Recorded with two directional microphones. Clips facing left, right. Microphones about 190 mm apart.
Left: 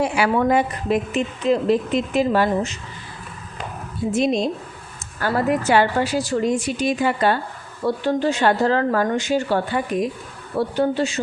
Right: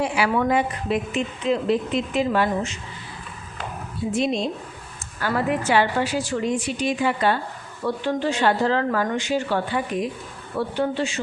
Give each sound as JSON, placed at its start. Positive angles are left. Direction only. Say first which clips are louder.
{"t": 0.0, "sound": "a woman's voice", "louder": "left 3 dB", "side_deg": 45}
{"t": 4.1, "sound": "a woman's voice", "louder": "left 4 dB", "side_deg": 40}